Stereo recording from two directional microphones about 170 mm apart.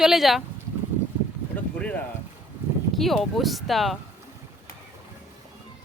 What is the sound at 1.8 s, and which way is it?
Speech, 10° left (ahead or behind).